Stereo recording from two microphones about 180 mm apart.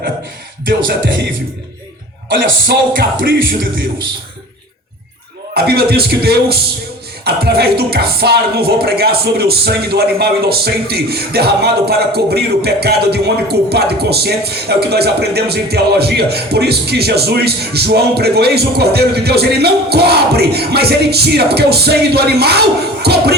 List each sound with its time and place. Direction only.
0.6 s music: 55° right (ahead or behind)
2.4 s music: 55° right (ahead or behind)
5.5 s speech: 60° right (ahead or behind)